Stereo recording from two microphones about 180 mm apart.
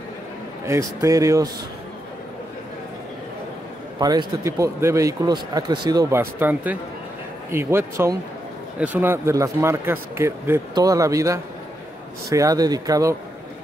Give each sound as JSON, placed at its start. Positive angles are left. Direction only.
{"t": 0.7, "sound": "speech", "side_deg": -15}
{"t": 4.0, "sound": "speech", "side_deg": -20}